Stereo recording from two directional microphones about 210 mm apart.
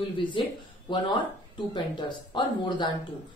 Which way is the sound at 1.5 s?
20° left (ahead or behind).